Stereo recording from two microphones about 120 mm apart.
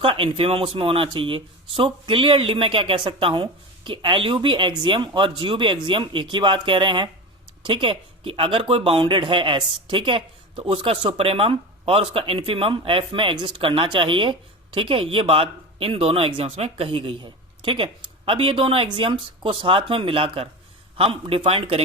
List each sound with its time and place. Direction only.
0.0 s speech: 50° right (ahead or behind)